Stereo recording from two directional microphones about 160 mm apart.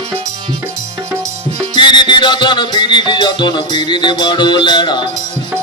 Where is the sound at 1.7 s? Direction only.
30° left (ahead or behind).